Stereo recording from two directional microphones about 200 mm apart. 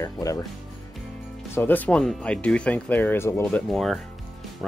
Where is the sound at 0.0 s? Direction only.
15° left (ahead or behind).